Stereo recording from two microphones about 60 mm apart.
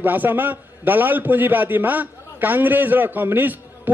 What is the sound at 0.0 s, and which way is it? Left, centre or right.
A man's voice, right.